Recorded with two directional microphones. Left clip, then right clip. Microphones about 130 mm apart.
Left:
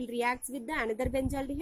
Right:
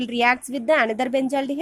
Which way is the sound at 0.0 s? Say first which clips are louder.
Right 12 dB; 20° right (ahead or behind).